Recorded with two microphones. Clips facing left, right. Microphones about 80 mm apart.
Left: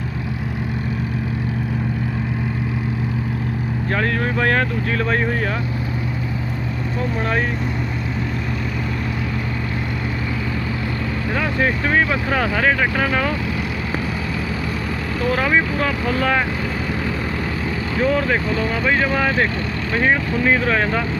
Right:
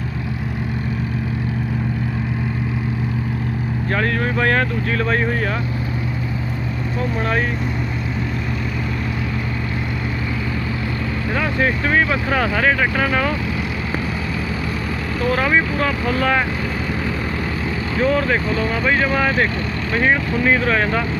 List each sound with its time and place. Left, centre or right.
3.9 s speech: right
7.2 s speech: right
11.3 s speech: right
15.3 s speech: right
18.0 s speech: right
18.6 s speech: right
18.9 s speech: right